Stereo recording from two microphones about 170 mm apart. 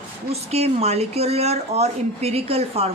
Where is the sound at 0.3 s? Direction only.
40° right (ahead or behind).